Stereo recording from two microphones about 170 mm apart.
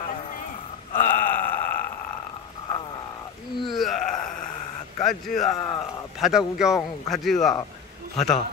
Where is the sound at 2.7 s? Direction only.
25° left (ahead or behind).